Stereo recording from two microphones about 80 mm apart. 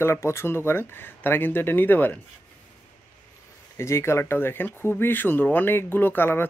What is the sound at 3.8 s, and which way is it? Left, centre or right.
A man's voice, left.